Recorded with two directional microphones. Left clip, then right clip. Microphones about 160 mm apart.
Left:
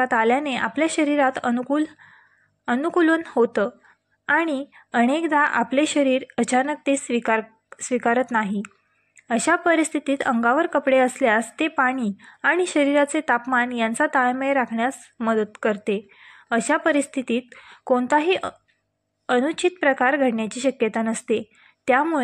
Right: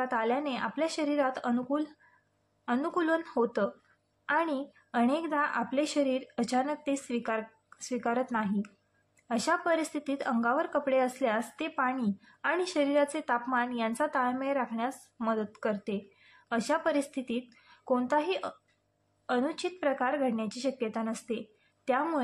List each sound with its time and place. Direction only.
0.0 s speech: 35° left (ahead or behind)